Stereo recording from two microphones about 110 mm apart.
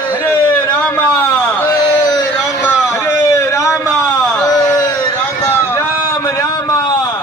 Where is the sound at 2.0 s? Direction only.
35° left (ahead or behind).